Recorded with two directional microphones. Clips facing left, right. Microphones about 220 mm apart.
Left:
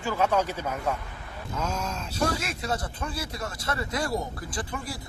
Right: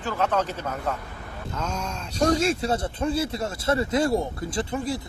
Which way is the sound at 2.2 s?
30° right (ahead or behind).